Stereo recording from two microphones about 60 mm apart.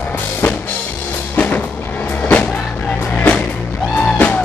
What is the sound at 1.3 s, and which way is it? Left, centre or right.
Music, left.